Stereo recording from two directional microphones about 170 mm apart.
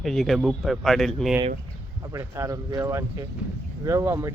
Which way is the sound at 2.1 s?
15° right (ahead or behind).